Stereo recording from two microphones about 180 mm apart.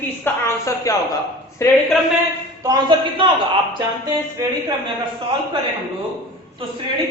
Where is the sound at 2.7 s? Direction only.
25° right (ahead or behind).